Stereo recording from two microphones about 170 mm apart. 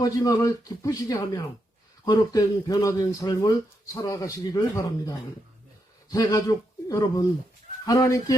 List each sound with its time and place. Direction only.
0.0 s speech: 20° left (ahead or behind)